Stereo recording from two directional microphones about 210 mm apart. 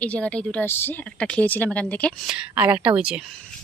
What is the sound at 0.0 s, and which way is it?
Speech, 5° left (ahead or behind).